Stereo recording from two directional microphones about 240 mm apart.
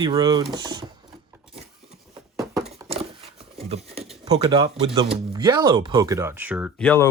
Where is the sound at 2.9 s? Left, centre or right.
Right.